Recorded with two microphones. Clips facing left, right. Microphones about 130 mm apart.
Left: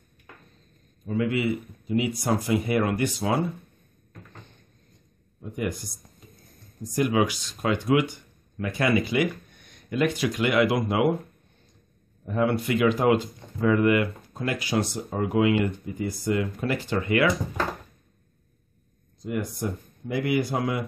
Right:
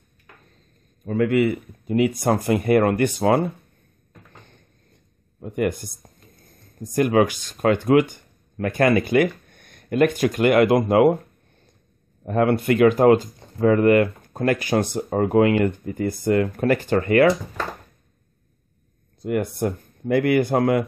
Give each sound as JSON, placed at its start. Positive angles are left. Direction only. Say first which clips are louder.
{"t": 1.0, "sound": "speech", "louder": "right 6 dB", "side_deg": -55}
{"t": 5.4, "sound": "speech", "louder": "right 7 dB", "side_deg": -55}
{"t": 12.3, "sound": "speech", "louder": "right 5 dB", "side_deg": -60}
{"t": 19.2, "sound": "speech", "louder": "right 6 dB", "side_deg": -60}